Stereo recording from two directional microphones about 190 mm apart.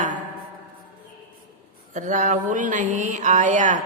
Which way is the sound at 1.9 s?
40° right (ahead or behind).